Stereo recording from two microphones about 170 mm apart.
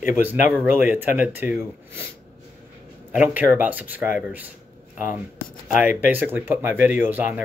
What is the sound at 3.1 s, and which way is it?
Speech, 10° right (ahead or behind).